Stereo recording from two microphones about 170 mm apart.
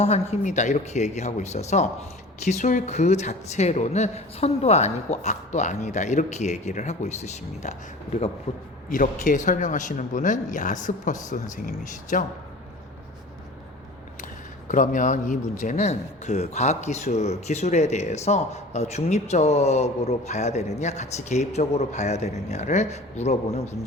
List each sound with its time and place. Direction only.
0.0 s a man's voice: 40° left (ahead or behind)
14.7 s a man's voice: 50° left (ahead or behind)